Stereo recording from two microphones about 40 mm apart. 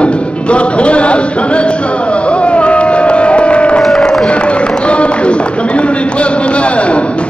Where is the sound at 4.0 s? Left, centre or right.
Centre.